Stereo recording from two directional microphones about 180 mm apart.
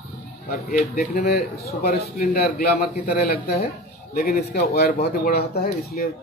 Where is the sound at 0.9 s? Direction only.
60° left (ahead or behind).